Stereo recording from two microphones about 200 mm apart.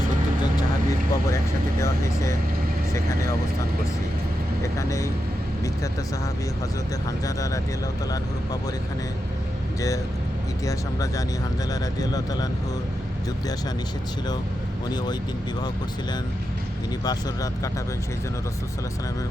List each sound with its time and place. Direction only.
0.5 s music: 15° left (ahead or behind)
4.6 s speech: 15° left (ahead or behind)
7.3 s speech: 15° left (ahead or behind)
11.7 s speech: 20° left (ahead or behind)
17.0 s speech: 20° left (ahead or behind)